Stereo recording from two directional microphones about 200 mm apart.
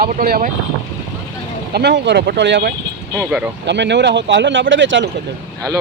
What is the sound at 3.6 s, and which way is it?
Speech, 60° right (ahead or behind).